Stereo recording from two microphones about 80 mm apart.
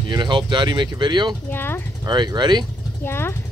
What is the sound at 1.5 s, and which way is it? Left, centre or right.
Speech, left.